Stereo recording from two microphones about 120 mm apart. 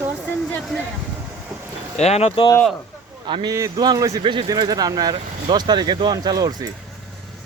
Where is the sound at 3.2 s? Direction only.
40° right (ahead or behind).